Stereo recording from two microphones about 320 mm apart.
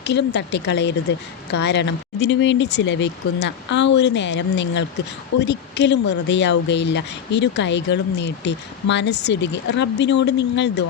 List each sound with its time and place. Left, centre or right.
0.0 s speech: left